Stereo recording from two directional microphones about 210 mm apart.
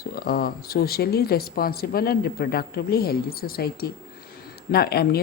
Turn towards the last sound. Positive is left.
turn(degrees=50)  # may be behind; listen again after turning